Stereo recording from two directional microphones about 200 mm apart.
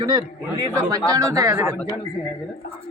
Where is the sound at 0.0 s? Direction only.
20° right (ahead or behind).